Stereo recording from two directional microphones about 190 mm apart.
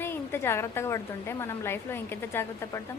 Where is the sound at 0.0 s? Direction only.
10° left (ahead or behind).